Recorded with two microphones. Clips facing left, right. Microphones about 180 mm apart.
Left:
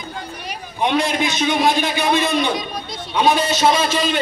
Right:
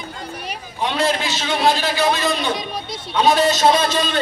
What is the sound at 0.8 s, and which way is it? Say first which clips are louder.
A man's voice: left 2 dB; 15° left (ahead or behind).